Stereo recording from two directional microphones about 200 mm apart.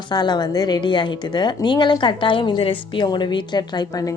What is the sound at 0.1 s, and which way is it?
A woman's voice, 20° left (ahead or behind).